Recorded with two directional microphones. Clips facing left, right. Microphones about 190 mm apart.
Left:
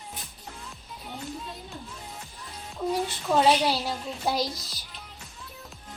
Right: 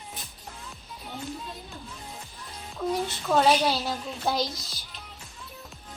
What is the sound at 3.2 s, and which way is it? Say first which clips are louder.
A woman's voice: even; 5° left (ahead or behind).